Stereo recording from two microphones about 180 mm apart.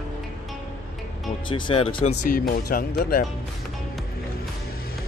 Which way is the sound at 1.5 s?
30° left (ahead or behind).